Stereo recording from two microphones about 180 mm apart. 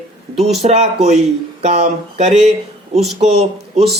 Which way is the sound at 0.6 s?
35° right (ahead or behind).